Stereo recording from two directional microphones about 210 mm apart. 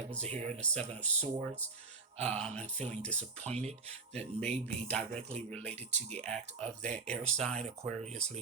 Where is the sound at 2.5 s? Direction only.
30° right (ahead or behind).